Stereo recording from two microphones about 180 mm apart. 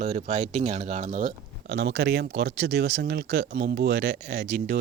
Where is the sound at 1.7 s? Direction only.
75° right (ahead or behind).